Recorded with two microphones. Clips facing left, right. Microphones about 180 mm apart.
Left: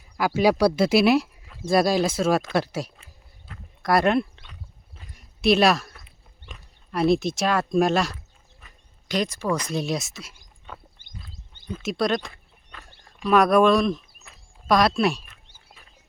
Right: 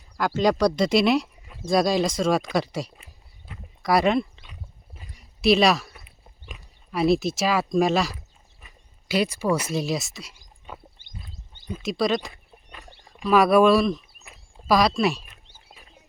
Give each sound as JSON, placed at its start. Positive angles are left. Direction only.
{"t": 0.2, "sound": "speech", "side_deg": 10}
{"t": 3.5, "sound": "dog", "side_deg": 0}
{"t": 5.1, "sound": "a sound", "side_deg": 0}
{"t": 6.4, "sound": "speech", "side_deg": -5}
{"t": 11.8, "sound": "speech", "side_deg": 0}